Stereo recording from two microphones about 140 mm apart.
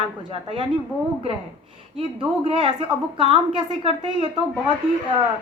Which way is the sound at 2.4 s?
35° right (ahead or behind).